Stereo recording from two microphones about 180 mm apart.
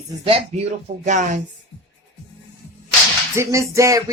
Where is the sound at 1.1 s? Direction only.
45° right (ahead or behind).